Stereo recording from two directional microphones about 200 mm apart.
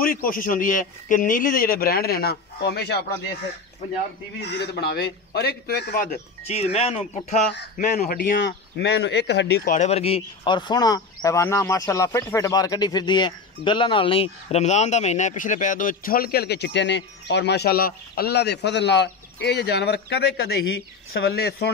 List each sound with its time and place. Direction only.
0.0 s a man's voice: 45° left (ahead or behind)
4.4 s a man's voice: 55° left (ahead or behind)
6.4 s speech: 30° left (ahead or behind)
7.5 s a man's voice: 40° left (ahead or behind); by 9.6 s 55° left (ahead or behind)
9.7 s a man's voice: 35° left (ahead or behind); by 21.6 s 55° left (ahead or behind)